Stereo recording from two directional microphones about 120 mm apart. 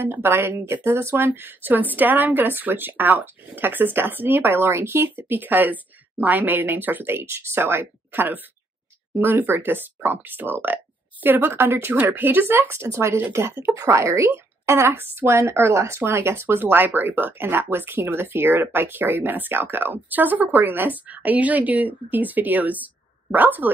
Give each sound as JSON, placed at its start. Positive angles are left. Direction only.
{"t": 0.0, "sound": "speech", "side_deg": -15}